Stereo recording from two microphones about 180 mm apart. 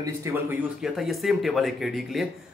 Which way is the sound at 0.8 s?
Centre (ahead or behind).